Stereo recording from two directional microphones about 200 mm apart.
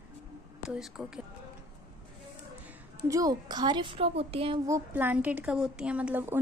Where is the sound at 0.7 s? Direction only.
5° right (ahead or behind).